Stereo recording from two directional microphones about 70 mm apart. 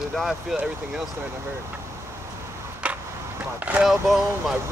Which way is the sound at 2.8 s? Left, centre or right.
Centre.